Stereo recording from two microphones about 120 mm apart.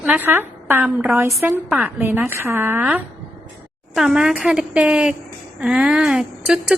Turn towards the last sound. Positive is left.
turn(degrees=-5)  # may be behind; listen again after turning